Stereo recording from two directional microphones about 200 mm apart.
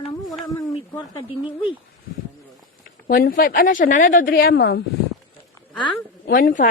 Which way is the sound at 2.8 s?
45° left (ahead or behind).